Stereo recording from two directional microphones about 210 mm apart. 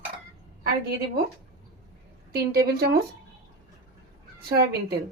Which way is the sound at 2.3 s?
45° right (ahead or behind).